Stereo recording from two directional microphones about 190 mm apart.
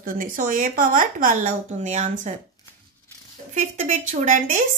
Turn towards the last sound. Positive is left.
turn(degrees=-40)  # may be behind; listen again after turning